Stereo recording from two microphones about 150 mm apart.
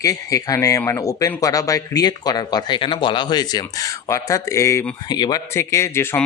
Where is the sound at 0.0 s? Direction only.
20° left (ahead or behind).